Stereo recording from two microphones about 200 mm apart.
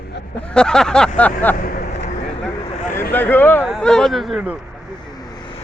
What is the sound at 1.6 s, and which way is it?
Speech, 45° left (ahead or behind).